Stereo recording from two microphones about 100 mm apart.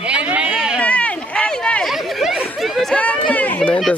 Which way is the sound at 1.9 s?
5° right (ahead or behind).